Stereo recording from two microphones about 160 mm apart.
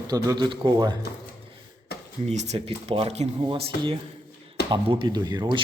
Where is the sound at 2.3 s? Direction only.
45° right (ahead or behind).